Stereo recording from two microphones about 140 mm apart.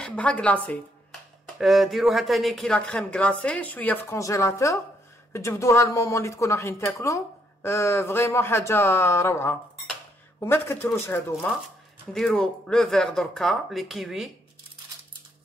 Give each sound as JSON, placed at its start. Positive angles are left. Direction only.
{"t": 0.0, "sound": "speech", "side_deg": 10}
{"t": 1.6, "sound": "a woman's voice", "side_deg": 0}
{"t": 11.6, "sound": "speech", "side_deg": 5}